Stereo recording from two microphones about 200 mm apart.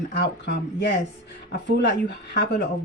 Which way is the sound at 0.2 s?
55° left (ahead or behind).